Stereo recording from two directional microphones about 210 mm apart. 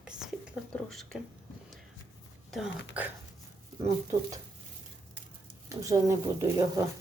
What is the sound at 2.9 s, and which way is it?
Speech, 5° right (ahead or behind).